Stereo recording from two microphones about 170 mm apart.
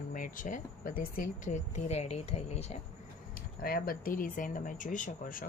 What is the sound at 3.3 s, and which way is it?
Speech, 60° left (ahead or behind).